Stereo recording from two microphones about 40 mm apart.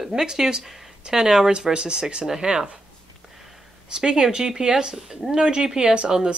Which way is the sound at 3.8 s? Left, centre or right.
Right.